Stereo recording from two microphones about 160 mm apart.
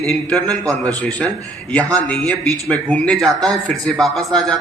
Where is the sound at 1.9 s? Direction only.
10° left (ahead or behind).